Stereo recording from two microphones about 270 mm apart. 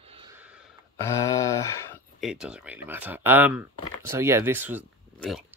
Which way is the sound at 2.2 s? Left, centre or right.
Centre.